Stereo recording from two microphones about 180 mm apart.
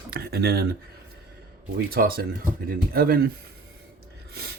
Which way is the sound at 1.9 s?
55° right (ahead or behind).